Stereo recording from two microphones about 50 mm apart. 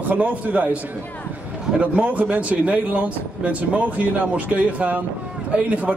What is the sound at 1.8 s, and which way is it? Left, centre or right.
A man's voice, right.